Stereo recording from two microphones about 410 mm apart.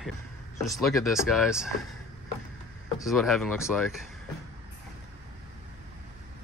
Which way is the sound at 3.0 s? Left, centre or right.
Centre.